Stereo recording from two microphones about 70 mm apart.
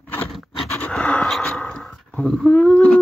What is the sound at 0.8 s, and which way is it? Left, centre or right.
Pant, centre.